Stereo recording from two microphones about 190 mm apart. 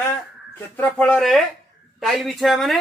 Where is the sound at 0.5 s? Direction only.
5° left (ahead or behind).